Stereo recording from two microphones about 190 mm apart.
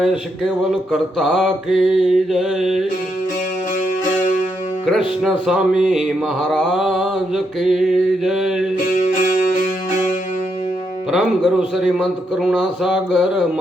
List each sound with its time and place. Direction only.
0.0 s speech: 5° right (ahead or behind)
4.9 s speech: centre (ahead or behind)
11.1 s speech: centre (ahead or behind)